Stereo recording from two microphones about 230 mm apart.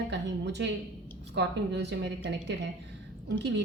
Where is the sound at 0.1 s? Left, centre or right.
Right.